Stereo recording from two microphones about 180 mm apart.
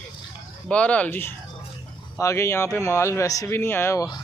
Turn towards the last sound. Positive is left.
turn(degrees=15)  # may be behind; listen again after turning